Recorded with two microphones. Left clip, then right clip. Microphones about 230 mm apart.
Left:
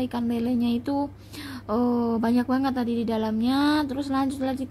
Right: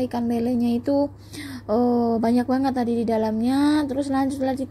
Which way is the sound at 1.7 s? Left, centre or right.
Centre.